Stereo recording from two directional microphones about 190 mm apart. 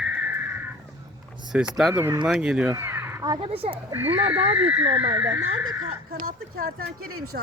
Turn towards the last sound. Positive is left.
turn(degrees=-55)  # may be behind; listen again after turning